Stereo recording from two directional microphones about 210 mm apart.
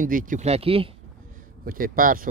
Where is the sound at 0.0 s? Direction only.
40° right (ahead or behind).